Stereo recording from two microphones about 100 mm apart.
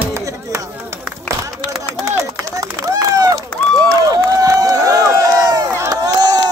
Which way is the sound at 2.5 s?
35° right (ahead or behind).